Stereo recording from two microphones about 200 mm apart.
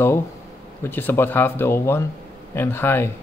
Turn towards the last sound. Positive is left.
turn(degrees=10)  # may be behind; listen again after turning